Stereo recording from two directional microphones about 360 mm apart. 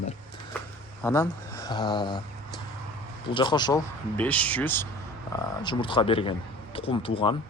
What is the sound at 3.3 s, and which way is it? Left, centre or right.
Speech, centre.